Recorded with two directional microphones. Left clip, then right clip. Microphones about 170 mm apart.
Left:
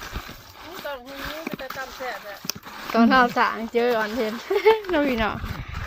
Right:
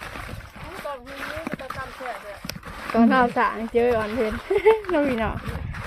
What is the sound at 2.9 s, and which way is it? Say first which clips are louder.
Speech: left 1 dB; 5° right (ahead or behind).